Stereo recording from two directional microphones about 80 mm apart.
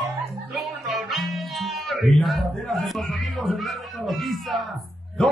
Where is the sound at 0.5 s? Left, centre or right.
Centre.